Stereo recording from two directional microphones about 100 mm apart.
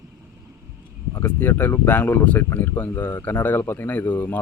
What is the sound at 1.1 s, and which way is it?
Speech, 20° left (ahead or behind).